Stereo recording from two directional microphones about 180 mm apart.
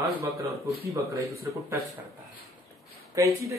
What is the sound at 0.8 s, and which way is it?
Speech, 15° right (ahead or behind).